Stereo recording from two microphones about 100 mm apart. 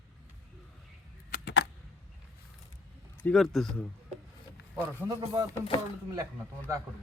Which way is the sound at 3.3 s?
5° left (ahead or behind).